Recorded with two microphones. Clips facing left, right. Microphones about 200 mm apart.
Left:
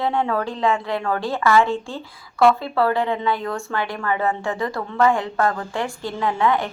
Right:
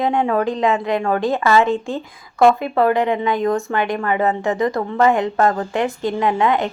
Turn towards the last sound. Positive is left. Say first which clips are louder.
# right 3 dB
turn(degrees=-20)  # may be behind; listen again after turning